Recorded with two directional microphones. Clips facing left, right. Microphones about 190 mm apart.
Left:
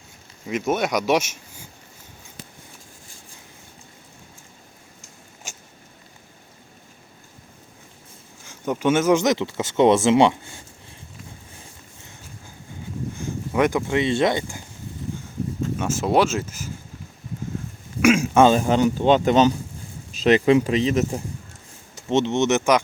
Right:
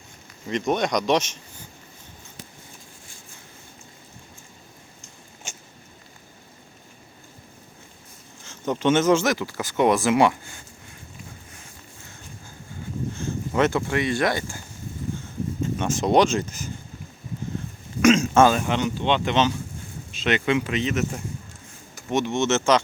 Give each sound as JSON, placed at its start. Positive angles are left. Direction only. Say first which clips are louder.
{"t": 0.4, "sound": "speech", "louder": "left 1 dB", "side_deg": 5}
{"t": 8.4, "sound": "speech", "louder": "even", "side_deg": 10}
{"t": 13.1, "sound": "speech", "louder": "left 1 dB", "side_deg": 10}
{"t": 15.8, "sound": "speech", "louder": "right 1 dB", "side_deg": 5}
{"t": 18.0, "sound": "a sound", "louder": "even", "side_deg": 10}
{"t": 18.4, "sound": "speech", "louder": "left 4 dB", "side_deg": 35}